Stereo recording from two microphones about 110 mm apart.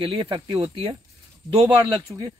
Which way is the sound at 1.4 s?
50° right (ahead or behind).